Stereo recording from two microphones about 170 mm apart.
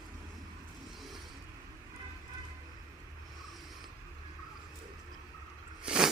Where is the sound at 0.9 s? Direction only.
Centre (ahead or behind).